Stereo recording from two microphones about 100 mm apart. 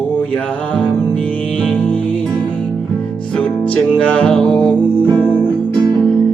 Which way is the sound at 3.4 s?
15° left (ahead or behind).